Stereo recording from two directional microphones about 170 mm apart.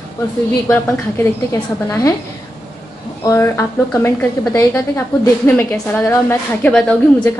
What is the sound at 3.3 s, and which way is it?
A woman's voice, 20° left (ahead or behind).